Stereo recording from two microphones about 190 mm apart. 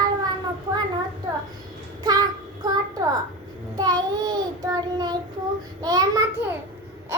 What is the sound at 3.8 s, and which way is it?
Child singing, 20° right (ahead or behind).